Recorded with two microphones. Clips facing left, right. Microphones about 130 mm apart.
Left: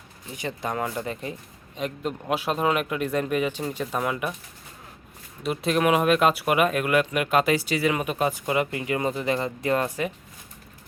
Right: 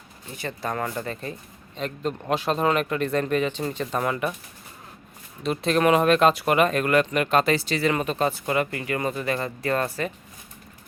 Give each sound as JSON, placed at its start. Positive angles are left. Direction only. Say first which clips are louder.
{"t": 0.3, "sound": "speech", "louder": "even", "side_deg": 15}
{"t": 5.4, "sound": "speech", "louder": "right 1 dB", "side_deg": 10}